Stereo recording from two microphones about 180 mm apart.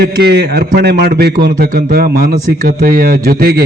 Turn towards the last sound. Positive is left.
turn(degrees=-60)  # may be behind; listen again after turning